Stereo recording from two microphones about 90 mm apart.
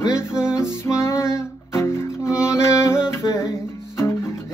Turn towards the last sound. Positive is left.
turn(degrees=30)  # may be behind; listen again after turning